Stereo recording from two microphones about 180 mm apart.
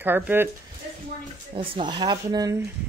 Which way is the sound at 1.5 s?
30° right (ahead or behind).